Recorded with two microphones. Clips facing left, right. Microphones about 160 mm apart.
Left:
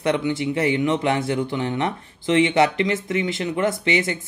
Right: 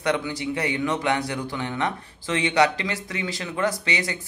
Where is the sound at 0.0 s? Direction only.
25° left (ahead or behind).